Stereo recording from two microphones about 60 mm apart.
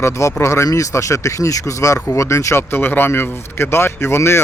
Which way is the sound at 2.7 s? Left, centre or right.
Left.